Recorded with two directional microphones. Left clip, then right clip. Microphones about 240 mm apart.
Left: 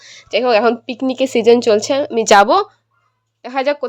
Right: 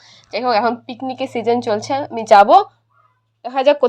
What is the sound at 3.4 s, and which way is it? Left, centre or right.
Speech, left.